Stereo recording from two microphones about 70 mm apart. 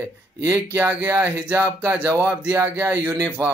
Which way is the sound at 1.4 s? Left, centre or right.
Right.